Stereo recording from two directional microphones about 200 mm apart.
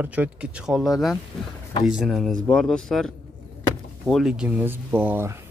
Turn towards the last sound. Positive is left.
turn(degrees=-10)  # may be behind; listen again after turning